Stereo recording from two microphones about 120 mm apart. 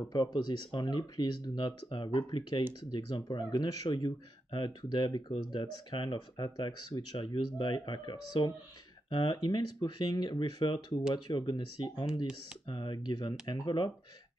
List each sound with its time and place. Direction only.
0.1 s speech: 35° left (ahead or behind)